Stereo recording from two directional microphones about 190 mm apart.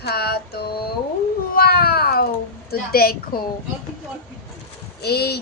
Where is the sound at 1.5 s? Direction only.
55° left (ahead or behind).